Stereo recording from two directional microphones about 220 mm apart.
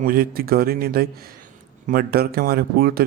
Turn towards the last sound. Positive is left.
turn(degrees=-45)  # may be behind; listen again after turning